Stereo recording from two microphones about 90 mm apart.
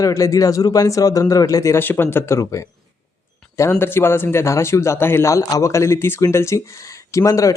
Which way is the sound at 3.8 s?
25° left (ahead or behind).